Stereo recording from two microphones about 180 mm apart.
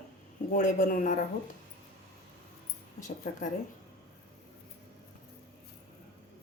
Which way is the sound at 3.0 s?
45° left (ahead or behind).